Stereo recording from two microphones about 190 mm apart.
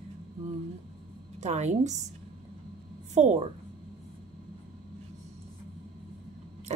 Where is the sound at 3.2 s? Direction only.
35° right (ahead or behind).